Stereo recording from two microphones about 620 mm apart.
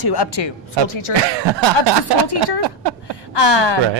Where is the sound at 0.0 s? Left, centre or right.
Left.